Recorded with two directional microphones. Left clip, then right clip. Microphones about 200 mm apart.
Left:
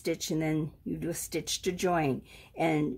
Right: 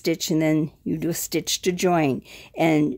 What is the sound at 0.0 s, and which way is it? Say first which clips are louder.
Speech: right 9 dB; 50° right (ahead or behind).